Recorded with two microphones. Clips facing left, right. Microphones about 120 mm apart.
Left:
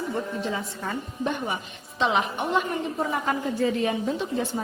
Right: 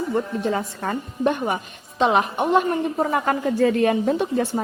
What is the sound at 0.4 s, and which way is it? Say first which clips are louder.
A woman's voice: right 6 dB; 55° right (ahead or behind).